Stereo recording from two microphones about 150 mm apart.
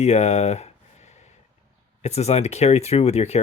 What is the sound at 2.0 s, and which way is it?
Speech, 45° left (ahead or behind).